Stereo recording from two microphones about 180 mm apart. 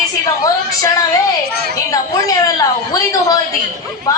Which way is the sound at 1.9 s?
20° left (ahead or behind).